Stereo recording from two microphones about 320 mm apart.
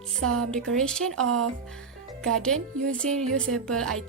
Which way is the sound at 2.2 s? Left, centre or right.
Centre.